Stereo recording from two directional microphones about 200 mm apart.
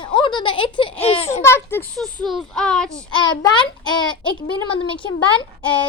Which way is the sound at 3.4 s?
20° left (ahead or behind).